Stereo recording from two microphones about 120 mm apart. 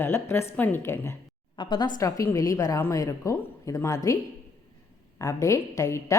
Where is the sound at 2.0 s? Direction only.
30° left (ahead or behind).